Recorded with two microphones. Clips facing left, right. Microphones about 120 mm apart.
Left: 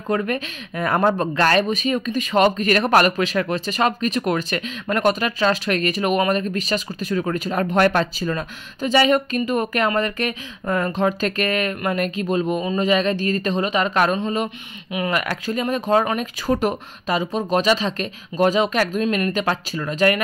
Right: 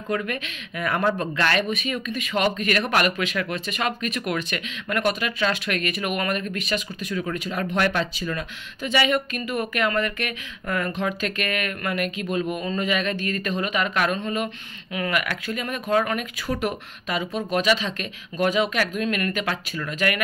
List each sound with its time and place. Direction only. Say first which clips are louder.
0.1 s speech: left 5 dB; 35° left (ahead or behind)